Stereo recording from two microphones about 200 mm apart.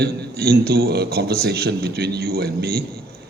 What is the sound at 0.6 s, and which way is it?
A man's voice, 50° right (ahead or behind).